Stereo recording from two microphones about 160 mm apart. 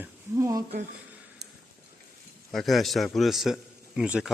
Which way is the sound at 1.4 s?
90° right.